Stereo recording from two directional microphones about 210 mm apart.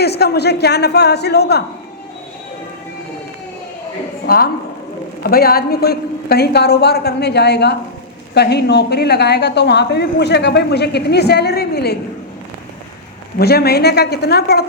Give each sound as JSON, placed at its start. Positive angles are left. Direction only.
{"t": 0.0, "sound": "speech", "side_deg": 50}
{"t": 4.3, "sound": "speech", "side_deg": 45}
{"t": 13.4, "sound": "speech", "side_deg": 50}